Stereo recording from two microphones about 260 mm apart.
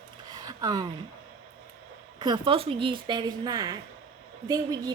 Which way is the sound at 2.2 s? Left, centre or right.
Centre.